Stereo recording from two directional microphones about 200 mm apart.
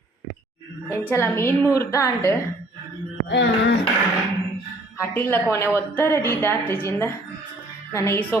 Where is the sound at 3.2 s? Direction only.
60° left (ahead or behind).